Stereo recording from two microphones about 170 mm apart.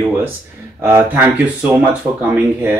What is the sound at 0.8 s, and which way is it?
Speech, 15° right (ahead or behind).